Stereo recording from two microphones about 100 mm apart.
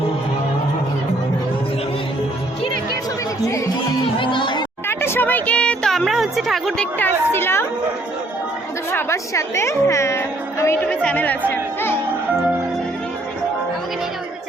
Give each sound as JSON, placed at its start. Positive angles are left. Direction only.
{"t": 4.2, "sound": "speech", "side_deg": 55}
{"t": 4.9, "sound": "a sound", "side_deg": 25}
{"t": 7.0, "sound": "a woman's voice", "side_deg": 25}
{"t": 8.9, "sound": "a woman's voice", "side_deg": 25}
{"t": 10.8, "sound": "speech", "side_deg": 10}